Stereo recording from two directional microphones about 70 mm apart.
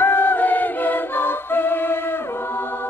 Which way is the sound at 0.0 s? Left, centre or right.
Left.